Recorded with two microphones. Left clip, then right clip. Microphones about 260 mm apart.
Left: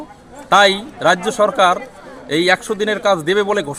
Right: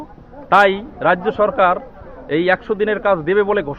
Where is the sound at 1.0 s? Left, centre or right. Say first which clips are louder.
Left 1 dB; centre.